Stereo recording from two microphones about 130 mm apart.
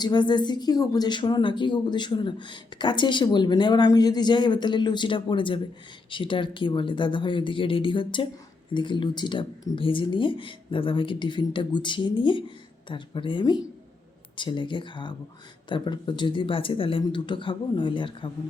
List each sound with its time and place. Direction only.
0.0 s a woman's voice: 35° left (ahead or behind)